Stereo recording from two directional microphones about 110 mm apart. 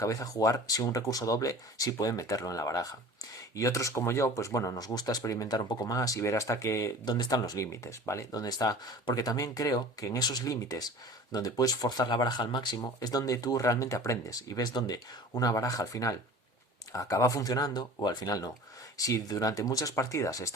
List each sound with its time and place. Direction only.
0.0 s speech: 30° left (ahead or behind)
7.0 s speech: 40° left (ahead or behind)